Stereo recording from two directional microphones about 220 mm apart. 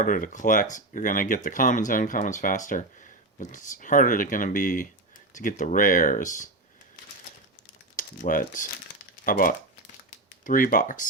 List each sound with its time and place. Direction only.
0.0 s speech: 35° left (ahead or behind)
7.9 s speech: 35° left (ahead or behind)